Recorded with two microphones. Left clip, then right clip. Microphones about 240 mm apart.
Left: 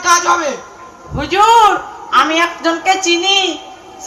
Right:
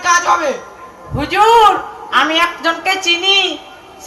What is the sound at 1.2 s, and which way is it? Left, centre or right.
Speech, right.